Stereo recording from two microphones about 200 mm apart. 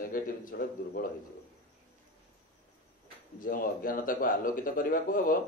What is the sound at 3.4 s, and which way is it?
A man's voice, 45° left (ahead or behind).